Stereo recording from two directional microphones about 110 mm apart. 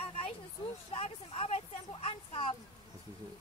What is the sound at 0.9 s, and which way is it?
Speech, 60° left (ahead or behind).